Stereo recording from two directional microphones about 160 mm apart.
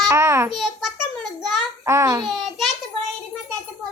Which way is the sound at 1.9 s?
20° right (ahead or behind).